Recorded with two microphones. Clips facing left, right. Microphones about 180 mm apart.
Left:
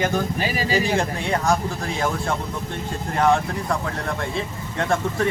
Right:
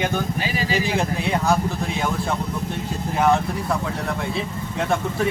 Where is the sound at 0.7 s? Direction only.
30° left (ahead or behind).